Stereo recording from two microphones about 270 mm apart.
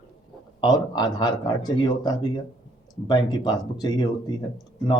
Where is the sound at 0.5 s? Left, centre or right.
Centre.